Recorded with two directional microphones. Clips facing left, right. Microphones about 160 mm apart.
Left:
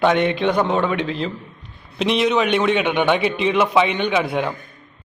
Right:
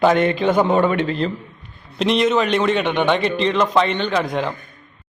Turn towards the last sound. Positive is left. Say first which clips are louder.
# left 1 dB
turn(degrees=5)  # may be behind; listen again after turning